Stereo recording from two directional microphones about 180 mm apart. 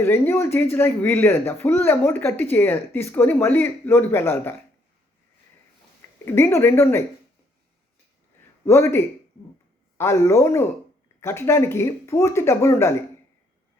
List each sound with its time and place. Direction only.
0.0 s speech: 15° left (ahead or behind)
6.2 s speech: 15° left (ahead or behind)
8.6 s speech: 15° left (ahead or behind)